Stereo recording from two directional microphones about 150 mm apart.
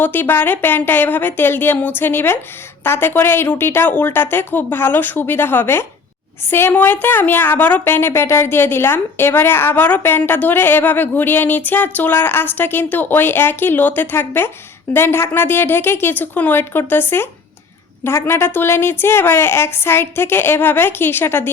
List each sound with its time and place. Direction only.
0.0 s a woman's voice: 15° left (ahead or behind)